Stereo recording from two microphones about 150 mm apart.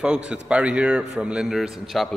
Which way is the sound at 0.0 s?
5° right (ahead or behind).